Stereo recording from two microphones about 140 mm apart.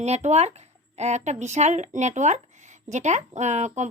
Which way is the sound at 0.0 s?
55° right (ahead or behind).